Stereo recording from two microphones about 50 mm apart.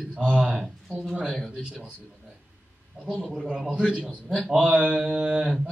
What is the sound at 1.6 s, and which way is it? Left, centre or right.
Speech, centre.